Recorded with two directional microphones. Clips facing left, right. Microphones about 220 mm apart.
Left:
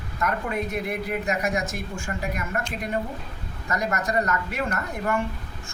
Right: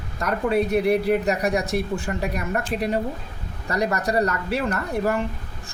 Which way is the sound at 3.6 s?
35° right (ahead or behind).